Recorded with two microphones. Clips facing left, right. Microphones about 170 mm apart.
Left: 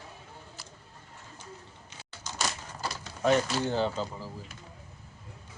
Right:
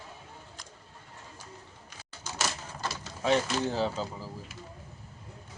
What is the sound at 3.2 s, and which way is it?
Speech, centre (ahead or behind).